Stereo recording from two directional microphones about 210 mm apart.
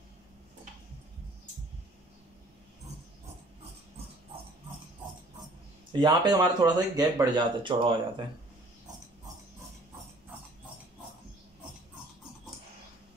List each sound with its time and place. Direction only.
5.9 s speech: 20° right (ahead or behind)